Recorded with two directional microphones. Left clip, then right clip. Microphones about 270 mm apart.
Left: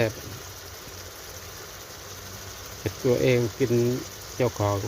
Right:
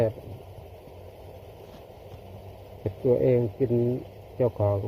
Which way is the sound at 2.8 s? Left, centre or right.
Centre.